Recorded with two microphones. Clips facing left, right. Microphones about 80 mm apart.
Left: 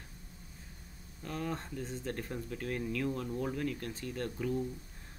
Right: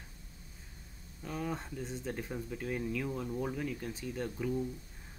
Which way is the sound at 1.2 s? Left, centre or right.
Centre.